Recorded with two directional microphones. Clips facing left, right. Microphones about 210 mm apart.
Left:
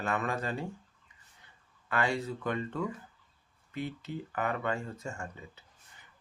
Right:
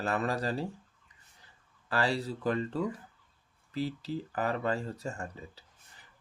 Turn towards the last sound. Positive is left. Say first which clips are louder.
# right 1 dB
turn(degrees=-35)  # may be behind; listen again after turning